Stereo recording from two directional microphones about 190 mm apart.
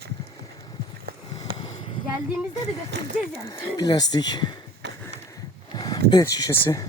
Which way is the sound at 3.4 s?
20° left (ahead or behind).